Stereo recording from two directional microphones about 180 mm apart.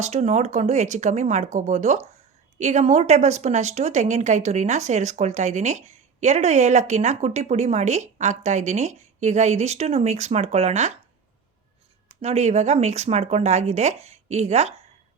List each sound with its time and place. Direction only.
0.0 s a woman's voice: 40° right (ahead or behind)
12.0 s a woman's voice: 35° right (ahead or behind)